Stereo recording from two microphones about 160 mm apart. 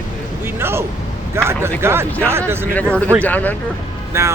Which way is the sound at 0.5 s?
15° right (ahead or behind).